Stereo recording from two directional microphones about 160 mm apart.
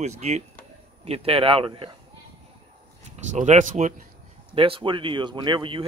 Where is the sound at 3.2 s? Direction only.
50° right (ahead or behind).